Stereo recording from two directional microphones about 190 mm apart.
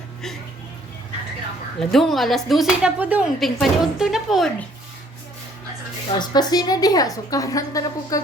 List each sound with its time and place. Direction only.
1.8 s a woman's voice: centre (ahead or behind)
6.1 s a woman's voice: 20° left (ahead or behind)